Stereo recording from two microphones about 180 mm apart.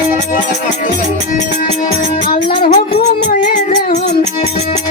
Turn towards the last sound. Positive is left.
turn(degrees=45)  # may be behind; listen again after turning